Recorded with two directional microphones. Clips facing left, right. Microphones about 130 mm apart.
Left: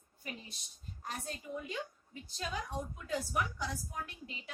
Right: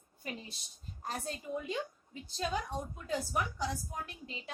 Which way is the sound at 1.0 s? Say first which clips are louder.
Right 3 dB; 35° right (ahead or behind).